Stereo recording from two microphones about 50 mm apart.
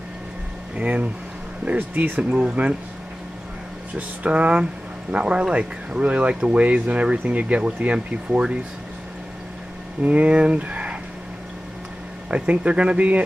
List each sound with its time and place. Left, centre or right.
0.7 s speech: right
3.9 s speech: right
10.0 s speech: right
12.3 s speech: right